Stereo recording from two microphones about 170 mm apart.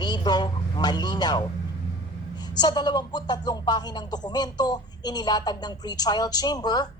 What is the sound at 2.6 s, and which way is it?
A woman's voice, 25° left (ahead or behind).